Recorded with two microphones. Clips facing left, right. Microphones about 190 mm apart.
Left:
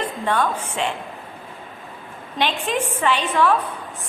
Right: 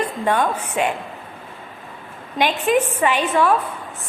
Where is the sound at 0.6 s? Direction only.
10° right (ahead or behind).